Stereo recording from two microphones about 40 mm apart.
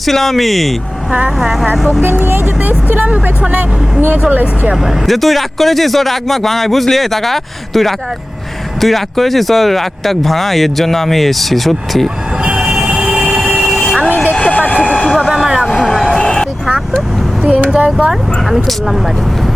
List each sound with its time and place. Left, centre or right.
0.0 s speech: centre
1.7 s speech: centre
2.6 s speech: right
4.3 s speech: right
4.7 s speech: centre
12.4 s vehicle: right
14.4 s vehicle: left
14.9 s vehicle: centre
16.0 s a sound: centre
17.7 s speech: right
18.1 s speech: centre